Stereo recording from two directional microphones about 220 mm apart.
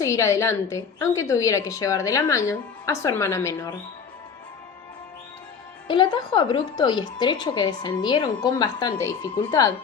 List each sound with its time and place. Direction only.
0.0 s a woman's voice: 15° left (ahead or behind)
5.9 s a woman's voice: 20° left (ahead or behind)